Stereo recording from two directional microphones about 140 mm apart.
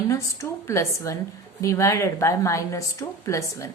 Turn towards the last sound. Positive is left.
turn(degrees=20)  # may be behind; listen again after turning